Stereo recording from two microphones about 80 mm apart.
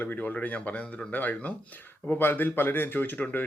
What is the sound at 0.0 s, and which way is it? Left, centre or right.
Speech, left.